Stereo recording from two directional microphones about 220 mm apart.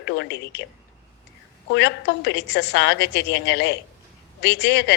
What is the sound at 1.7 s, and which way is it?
A woman's voice, 50° left (ahead or behind).